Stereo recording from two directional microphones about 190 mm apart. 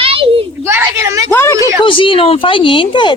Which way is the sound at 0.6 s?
15° right (ahead or behind).